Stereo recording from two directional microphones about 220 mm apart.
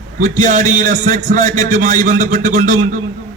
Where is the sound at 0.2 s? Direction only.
35° right (ahead or behind).